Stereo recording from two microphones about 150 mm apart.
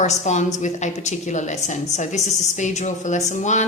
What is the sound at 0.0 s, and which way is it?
A woman's voice, 50° left (ahead or behind).